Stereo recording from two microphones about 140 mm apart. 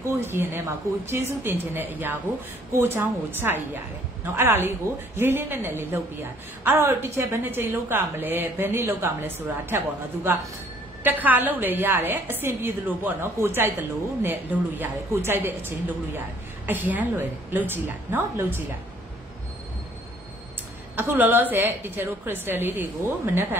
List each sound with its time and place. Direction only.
0.3 s a woman's voice: 15° right (ahead or behind)
20.9 s a woman's voice: 15° right (ahead or behind)